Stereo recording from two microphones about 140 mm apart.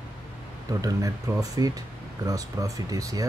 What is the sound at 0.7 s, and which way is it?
Speech, 25° right (ahead or behind).